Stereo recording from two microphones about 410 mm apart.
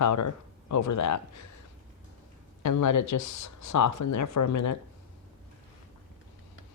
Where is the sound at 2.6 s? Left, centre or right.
Left.